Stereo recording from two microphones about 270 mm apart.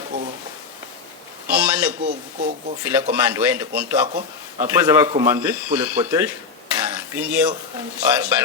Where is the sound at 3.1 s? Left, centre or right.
Centre.